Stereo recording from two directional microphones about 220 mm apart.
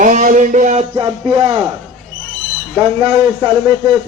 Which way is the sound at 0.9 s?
20° right (ahead or behind).